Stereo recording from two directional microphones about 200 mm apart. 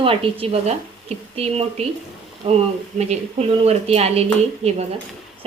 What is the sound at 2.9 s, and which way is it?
Speech, 30° right (ahead or behind).